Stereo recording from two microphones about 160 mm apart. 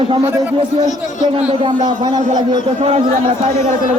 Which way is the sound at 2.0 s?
25° right (ahead or behind).